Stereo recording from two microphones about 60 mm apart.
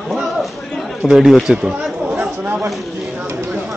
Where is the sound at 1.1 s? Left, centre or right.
Centre.